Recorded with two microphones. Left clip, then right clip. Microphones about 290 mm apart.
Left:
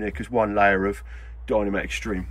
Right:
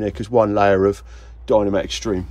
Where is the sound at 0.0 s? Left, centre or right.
Centre.